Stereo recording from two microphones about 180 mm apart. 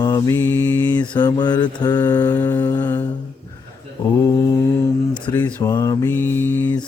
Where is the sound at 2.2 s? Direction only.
10° left (ahead or behind).